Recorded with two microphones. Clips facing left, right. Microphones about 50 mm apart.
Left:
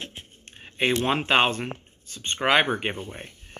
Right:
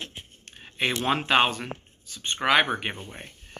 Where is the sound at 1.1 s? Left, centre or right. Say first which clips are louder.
Right 2 dB; left.